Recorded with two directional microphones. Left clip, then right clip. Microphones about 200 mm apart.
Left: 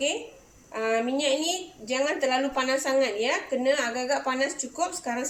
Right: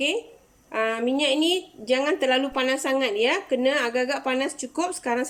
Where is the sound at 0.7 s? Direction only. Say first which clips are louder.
Right 2 dB; 50° right (ahead or behind).